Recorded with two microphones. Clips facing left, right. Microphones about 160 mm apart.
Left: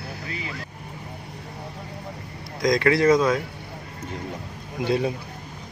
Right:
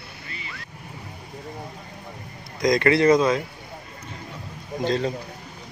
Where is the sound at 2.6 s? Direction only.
Centre (ahead or behind).